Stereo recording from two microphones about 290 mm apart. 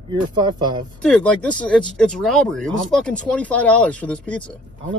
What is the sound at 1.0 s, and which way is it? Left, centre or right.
Speech, centre.